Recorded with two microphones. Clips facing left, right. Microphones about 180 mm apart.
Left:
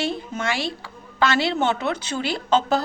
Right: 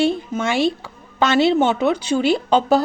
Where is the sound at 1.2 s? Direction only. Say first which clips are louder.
Right 6 dB; 20° right (ahead or behind).